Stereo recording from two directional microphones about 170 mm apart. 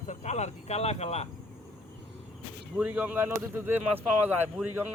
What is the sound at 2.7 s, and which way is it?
Speech, 10° right (ahead or behind).